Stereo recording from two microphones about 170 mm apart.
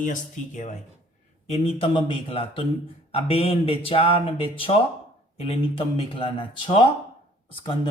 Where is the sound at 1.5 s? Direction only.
35° left (ahead or behind).